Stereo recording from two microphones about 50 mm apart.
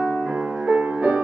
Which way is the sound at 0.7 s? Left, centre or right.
Right.